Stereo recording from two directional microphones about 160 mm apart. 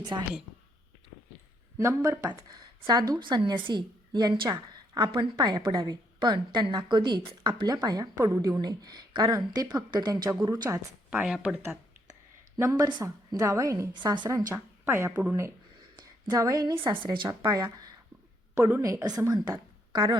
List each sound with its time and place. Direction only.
0.1 s speech: 25° right (ahead or behind)
1.8 s speech: 20° right (ahead or behind)
11.1 s a woman's voice: 10° right (ahead or behind); by 20.1 s 25° right (ahead or behind)